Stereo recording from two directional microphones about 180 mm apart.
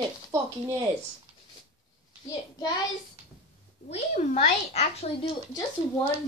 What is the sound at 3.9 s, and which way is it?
A woman's voice, 35° left (ahead or behind).